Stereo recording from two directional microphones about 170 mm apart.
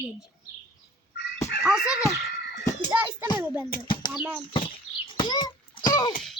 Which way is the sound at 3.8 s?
30° left (ahead or behind).